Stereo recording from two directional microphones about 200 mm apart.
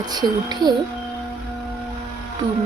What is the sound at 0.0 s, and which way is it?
Speech, 20° right (ahead or behind).